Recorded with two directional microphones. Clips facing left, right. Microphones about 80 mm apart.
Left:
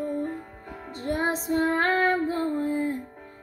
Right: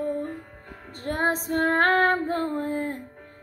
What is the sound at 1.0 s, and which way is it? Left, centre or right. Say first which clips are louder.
Female singing: right 1 dB; right.